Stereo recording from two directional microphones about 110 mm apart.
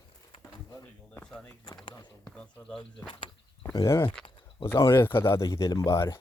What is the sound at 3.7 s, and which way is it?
Speech, 30° left (ahead or behind).